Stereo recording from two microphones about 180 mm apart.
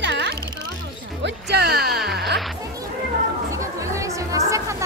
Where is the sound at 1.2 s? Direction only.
65° right (ahead or behind).